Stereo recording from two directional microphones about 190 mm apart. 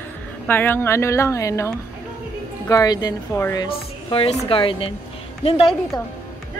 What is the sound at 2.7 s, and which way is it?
Speech, 20° left (ahead or behind).